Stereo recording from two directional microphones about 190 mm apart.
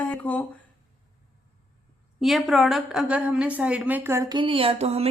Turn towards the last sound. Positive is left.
turn(degrees=-35)  # may be behind; listen again after turning